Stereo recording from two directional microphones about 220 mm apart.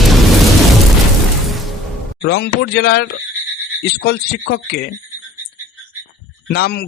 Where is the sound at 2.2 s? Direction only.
50° left (ahead or behind).